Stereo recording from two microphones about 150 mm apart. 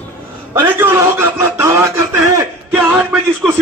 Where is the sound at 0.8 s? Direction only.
15° right (ahead or behind).